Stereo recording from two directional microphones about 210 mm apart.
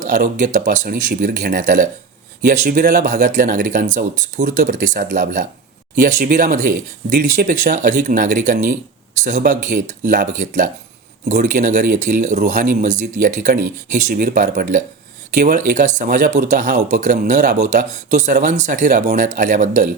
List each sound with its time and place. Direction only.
0.0 s speech: 35° right (ahead or behind)